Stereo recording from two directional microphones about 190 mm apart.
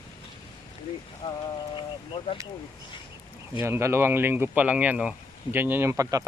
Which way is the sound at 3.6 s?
15° right (ahead or behind).